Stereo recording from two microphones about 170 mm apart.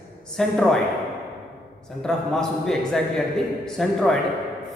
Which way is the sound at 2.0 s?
Centre (ahead or behind).